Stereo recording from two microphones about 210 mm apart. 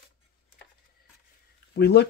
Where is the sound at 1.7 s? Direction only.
50° left (ahead or behind).